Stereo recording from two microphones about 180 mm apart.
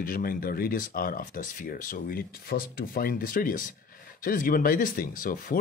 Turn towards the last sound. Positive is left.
turn(degrees=50)  # may be behind; listen again after turning